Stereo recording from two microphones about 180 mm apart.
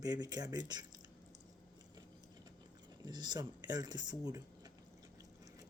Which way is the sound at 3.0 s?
25° right (ahead or behind).